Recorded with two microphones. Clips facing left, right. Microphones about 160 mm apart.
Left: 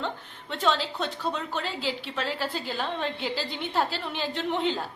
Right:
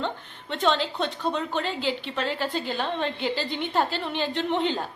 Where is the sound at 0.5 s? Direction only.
5° left (ahead or behind).